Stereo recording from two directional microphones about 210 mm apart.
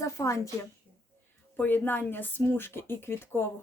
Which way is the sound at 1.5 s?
10° left (ahead or behind).